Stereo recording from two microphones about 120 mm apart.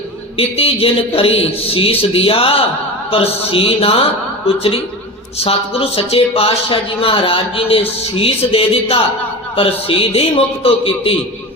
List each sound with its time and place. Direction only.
0.3 s speech: 50° left (ahead or behind)